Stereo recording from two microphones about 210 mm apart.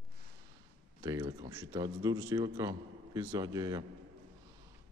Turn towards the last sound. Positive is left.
turn(degrees=-15)  # may be behind; listen again after turning